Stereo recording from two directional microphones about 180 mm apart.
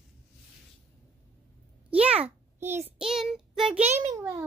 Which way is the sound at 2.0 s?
35° right (ahead or behind).